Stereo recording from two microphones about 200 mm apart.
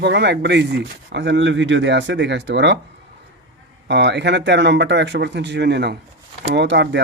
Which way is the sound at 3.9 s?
60° right (ahead or behind).